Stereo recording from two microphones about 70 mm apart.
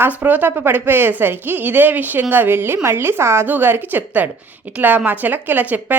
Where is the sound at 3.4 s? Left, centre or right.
Right.